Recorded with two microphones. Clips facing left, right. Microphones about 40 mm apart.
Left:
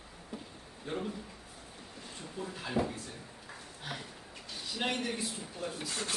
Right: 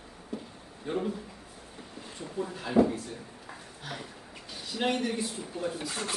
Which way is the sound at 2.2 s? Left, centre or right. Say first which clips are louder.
Right 7 dB; centre.